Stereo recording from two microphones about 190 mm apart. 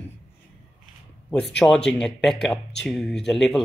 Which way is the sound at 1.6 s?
5° left (ahead or behind).